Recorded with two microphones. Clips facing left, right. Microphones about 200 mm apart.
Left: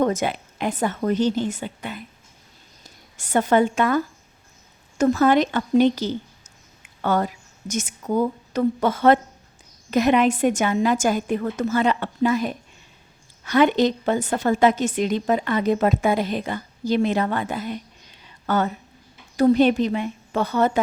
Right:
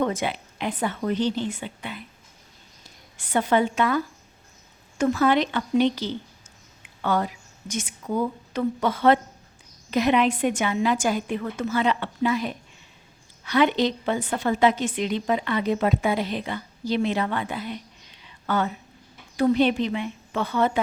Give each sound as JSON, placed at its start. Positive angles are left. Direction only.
{"t": 0.0, "sound": "a woman's voice", "side_deg": 45}
{"t": 3.2, "sound": "a woman's voice", "side_deg": 45}